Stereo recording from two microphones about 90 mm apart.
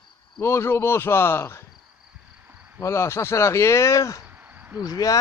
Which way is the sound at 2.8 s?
30° left (ahead or behind).